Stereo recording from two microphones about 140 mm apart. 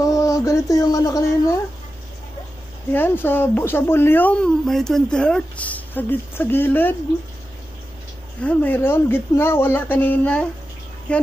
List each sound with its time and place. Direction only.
0.0 s a sound: 25° left (ahead or behind)
2.9 s speech: 15° left (ahead or behind)
8.4 s speech: 10° left (ahead or behind)